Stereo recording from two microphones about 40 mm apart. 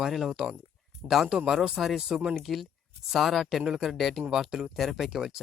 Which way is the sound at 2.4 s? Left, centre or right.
Centre.